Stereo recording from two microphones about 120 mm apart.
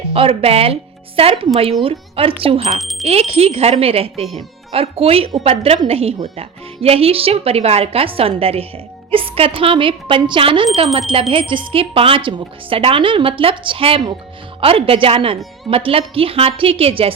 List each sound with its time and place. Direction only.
0.1 s a woman's voice: 50° right (ahead or behind)